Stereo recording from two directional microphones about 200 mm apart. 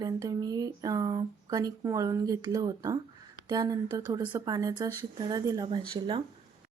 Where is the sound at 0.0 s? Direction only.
20° right (ahead or behind).